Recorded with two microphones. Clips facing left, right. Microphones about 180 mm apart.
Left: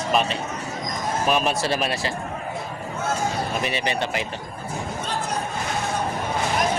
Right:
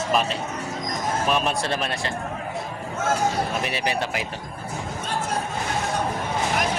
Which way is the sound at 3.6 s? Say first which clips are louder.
Left 1 dB; centre (ahead or behind).